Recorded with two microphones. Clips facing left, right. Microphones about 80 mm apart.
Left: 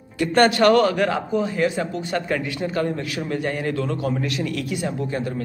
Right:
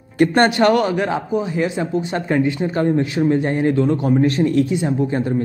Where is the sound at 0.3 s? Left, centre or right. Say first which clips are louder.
Left 1 dB; right.